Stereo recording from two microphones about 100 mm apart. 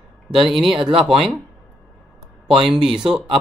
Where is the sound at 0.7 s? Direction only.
65° right (ahead or behind).